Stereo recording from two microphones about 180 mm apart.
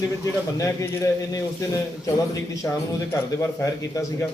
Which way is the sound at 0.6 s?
20° left (ahead or behind).